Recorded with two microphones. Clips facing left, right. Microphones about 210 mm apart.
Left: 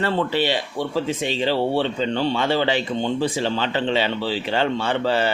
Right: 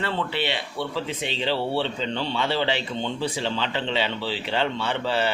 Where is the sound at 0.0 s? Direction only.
40° left (ahead or behind).